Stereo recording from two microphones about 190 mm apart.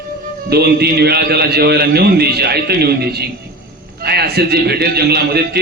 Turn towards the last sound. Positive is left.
turn(degrees=-55)  # may be behind; listen again after turning